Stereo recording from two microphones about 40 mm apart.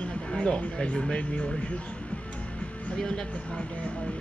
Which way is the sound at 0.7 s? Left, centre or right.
Left.